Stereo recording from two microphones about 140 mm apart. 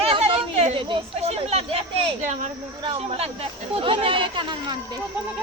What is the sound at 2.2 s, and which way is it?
Speech, 60° right (ahead or behind).